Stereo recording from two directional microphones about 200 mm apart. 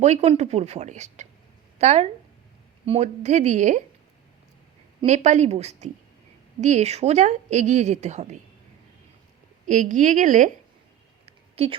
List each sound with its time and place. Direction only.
0.0 s a woman's voice: 35° right (ahead or behind)
4.9 s a woman's voice: 35° right (ahead or behind)
9.6 s a woman's voice: 40° right (ahead or behind)
11.3 s a sound: 30° right (ahead or behind)